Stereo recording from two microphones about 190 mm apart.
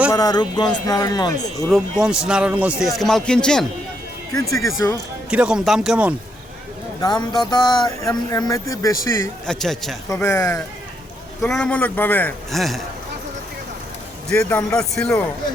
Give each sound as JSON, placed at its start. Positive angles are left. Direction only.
{"t": 0.1, "sound": "speech", "side_deg": 20}
{"t": 1.7, "sound": "a man's voice", "side_deg": -5}
{"t": 4.4, "sound": "speech", "side_deg": 15}
{"t": 5.3, "sound": "a man's voice", "side_deg": -5}
{"t": 7.0, "sound": "speech", "side_deg": 20}
{"t": 9.5, "sound": "a man's voice", "side_deg": 0}
{"t": 10.1, "sound": "speech", "side_deg": 15}
{"t": 11.4, "sound": "a man's voice", "side_deg": 5}
{"t": 14.3, "sound": "a man's voice", "side_deg": 5}